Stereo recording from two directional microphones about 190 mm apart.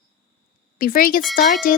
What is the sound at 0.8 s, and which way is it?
A woman's voice, 50° left (ahead or behind).